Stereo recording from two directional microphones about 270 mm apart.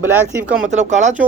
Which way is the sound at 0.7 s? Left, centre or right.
Right.